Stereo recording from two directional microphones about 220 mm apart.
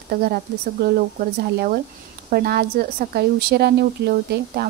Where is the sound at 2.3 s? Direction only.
45° right (ahead or behind).